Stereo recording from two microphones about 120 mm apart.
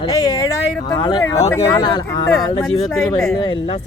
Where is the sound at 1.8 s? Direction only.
40° left (ahead or behind).